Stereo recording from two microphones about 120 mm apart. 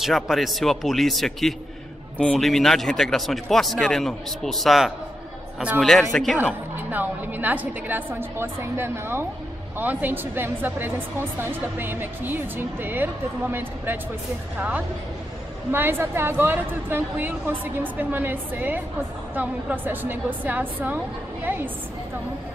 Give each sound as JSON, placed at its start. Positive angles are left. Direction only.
{"t": 0.0, "sound": "speech", "side_deg": 0}
{"t": 6.9, "sound": "a woman's voice", "side_deg": -15}
{"t": 15.7, "sound": "speech", "side_deg": -20}